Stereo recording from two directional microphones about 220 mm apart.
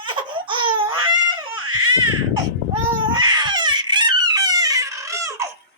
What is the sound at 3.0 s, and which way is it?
Baby cry, 20° right (ahead or behind).